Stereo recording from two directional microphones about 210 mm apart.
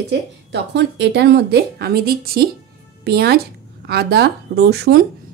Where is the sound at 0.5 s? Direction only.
55° right (ahead or behind).